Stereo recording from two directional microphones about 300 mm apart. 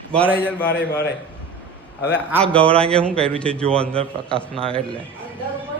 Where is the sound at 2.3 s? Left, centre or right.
Centre.